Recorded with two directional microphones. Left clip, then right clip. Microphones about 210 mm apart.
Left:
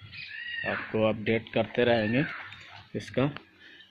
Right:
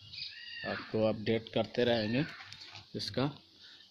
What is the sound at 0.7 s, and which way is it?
Speech, 20° right (ahead or behind).